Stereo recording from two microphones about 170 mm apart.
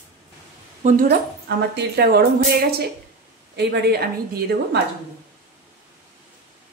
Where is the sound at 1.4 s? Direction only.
75° right (ahead or behind).